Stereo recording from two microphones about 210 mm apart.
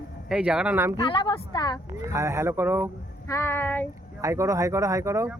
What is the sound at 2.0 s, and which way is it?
Speech, 15° right (ahead or behind).